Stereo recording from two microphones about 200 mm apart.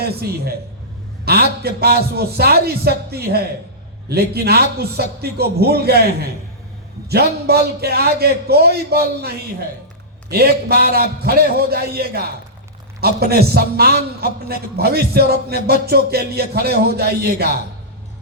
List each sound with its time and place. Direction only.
0.0 s a man's voice: 50° right (ahead or behind)
10.3 s a man's voice: 50° right (ahead or behind)